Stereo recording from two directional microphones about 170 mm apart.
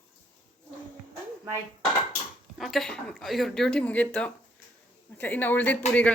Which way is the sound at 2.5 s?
Centre (ahead or behind).